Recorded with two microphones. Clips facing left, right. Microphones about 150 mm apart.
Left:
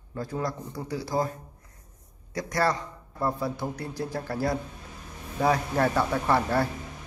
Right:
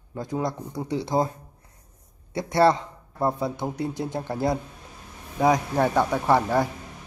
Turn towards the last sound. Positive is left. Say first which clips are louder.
# right 3 dB
turn(degrees=-15)  # may be behind; listen again after turning